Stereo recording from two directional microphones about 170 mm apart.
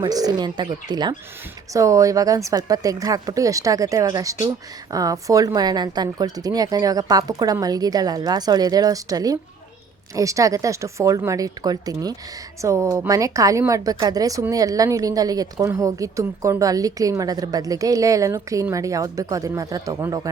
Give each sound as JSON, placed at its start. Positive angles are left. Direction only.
{"t": 0.0, "sound": "a woman's voice", "side_deg": -25}